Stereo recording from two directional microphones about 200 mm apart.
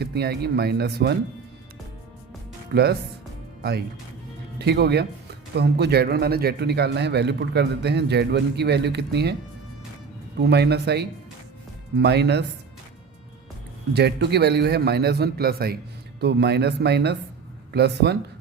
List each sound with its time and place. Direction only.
0.0 s a man's voice: 55° right (ahead or behind)
2.7 s a man's voice: 55° right (ahead or behind)
10.4 s a man's voice: 55° right (ahead or behind)
13.9 s a man's voice: 55° right (ahead or behind)